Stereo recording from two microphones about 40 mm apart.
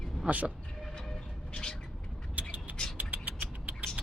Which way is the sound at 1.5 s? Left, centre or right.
Left.